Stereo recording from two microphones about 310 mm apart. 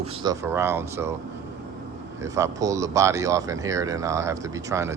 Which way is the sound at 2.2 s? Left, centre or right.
Centre.